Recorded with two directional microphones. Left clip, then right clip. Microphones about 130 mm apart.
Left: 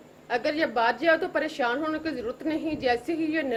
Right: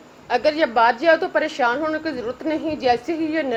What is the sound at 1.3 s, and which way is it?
A woman's voice, 15° right (ahead or behind).